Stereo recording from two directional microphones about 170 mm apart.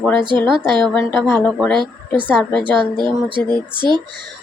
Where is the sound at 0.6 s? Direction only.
25° right (ahead or behind).